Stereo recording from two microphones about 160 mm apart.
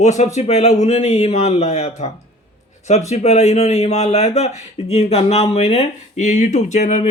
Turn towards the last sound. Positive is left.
turn(degrees=45)  # may be behind; listen again after turning